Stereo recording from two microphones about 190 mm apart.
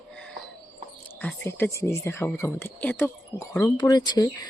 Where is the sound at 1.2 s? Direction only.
10° left (ahead or behind).